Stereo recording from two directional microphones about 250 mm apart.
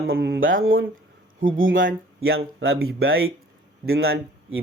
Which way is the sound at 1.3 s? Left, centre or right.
Right.